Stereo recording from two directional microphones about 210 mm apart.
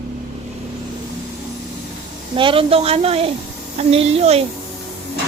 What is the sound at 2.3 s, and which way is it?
A woman's voice, 25° right (ahead or behind).